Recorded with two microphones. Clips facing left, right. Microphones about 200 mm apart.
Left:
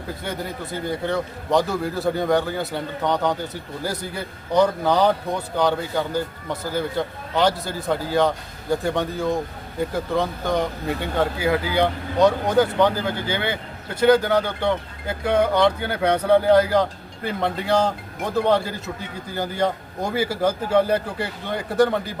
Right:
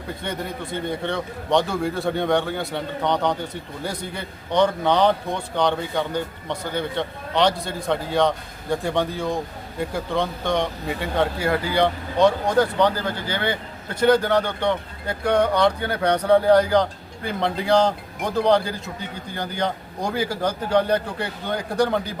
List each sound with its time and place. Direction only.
0.1 s speech: 5° left (ahead or behind)